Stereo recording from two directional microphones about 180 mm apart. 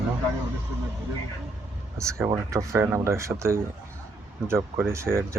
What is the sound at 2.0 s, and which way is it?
Speech, 15° right (ahead or behind).